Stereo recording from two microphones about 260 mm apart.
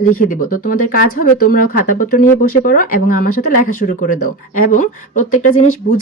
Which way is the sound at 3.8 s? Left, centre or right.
Left.